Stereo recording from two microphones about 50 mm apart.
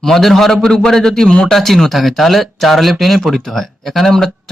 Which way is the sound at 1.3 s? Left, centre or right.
Centre.